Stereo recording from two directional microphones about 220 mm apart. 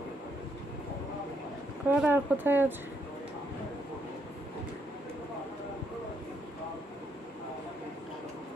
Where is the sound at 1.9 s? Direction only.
10° right (ahead or behind).